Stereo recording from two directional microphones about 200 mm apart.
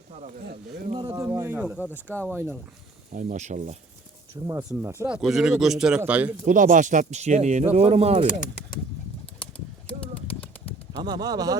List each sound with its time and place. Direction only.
0.1 s speech: 35° right (ahead or behind)
0.9 s speech: 20° right (ahead or behind)
3.1 s speech: 40° right (ahead or behind)
4.4 s speech: 15° right (ahead or behind)
5.0 s speech: 5° right (ahead or behind)
6.4 s speech: 40° right (ahead or behind)
8.3 s speech: 45° left (ahead or behind)
11.0 s speech: 20° right (ahead or behind)